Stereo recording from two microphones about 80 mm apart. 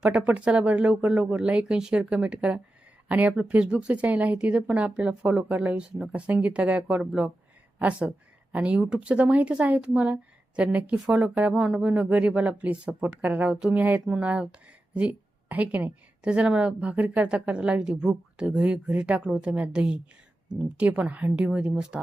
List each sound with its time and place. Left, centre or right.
0.0 s a woman's voice: centre